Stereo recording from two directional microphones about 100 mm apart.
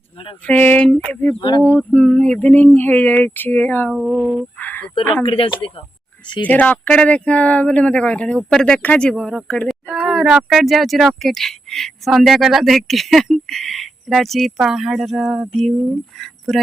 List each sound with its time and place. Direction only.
0.4 s speech: 15° left (ahead or behind)
1.4 s speech: 50° left (ahead or behind)
1.8 s speech: 15° left (ahead or behind)
3.9 s speech: 5° right (ahead or behind)
4.5 s speech: 20° left (ahead or behind)
5.2 s speech: 65° left (ahead or behind)
6.4 s speech: 15° left (ahead or behind)
9.9 s speech: 5° right (ahead or behind)